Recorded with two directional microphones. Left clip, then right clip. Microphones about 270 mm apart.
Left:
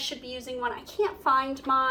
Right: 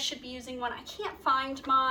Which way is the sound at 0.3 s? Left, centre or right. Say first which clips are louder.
Left 4 dB; centre.